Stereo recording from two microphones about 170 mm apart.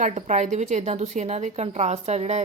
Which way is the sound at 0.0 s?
45° right (ahead or behind).